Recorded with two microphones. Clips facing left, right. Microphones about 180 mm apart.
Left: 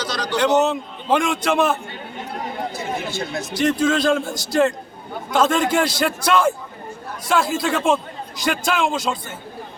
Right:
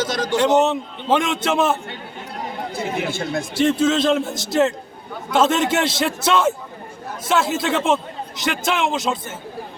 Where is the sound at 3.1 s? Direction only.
55° right (ahead or behind).